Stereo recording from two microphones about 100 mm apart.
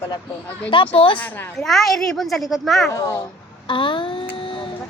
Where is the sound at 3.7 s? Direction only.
55° left (ahead or behind).